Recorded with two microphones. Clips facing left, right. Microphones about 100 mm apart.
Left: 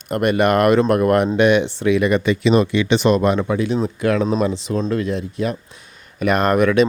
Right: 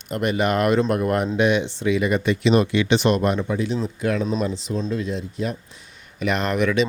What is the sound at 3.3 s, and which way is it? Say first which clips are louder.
Speech: left 4 dB; 85° left.